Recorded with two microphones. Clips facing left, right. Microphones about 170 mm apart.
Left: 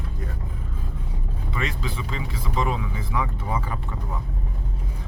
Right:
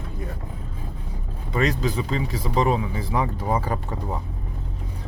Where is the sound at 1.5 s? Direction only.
40° right (ahead or behind).